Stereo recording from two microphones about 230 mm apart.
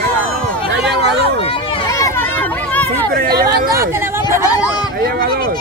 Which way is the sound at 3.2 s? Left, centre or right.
Right.